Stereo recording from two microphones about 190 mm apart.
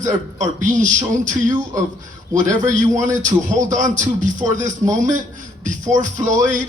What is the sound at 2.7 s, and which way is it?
A man's voice, 40° right (ahead or behind).